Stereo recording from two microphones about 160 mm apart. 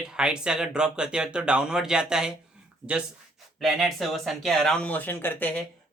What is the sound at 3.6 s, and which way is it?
A man's voice, centre (ahead or behind).